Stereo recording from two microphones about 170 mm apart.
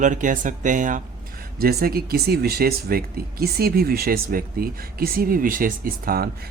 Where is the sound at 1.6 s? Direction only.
65° right (ahead or behind).